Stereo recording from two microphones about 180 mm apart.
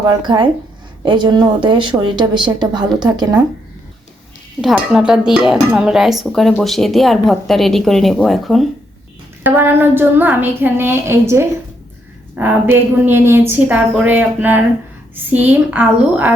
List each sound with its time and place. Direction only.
0.2 s speech: 25° right (ahead or behind)
4.6 s speech: 5° right (ahead or behind)
9.4 s a woman's voice: 10° right (ahead or behind)